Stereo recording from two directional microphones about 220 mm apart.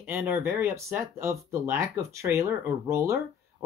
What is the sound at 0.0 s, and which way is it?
Speech, 10° right (ahead or behind).